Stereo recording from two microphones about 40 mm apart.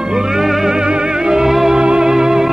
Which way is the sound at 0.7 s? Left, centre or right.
Right.